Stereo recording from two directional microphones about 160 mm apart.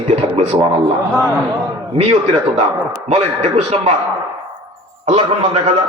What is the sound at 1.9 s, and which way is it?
A man's voice, 40° right (ahead or behind).